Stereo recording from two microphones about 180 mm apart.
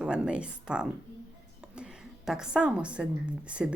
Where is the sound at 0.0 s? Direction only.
5° right (ahead or behind).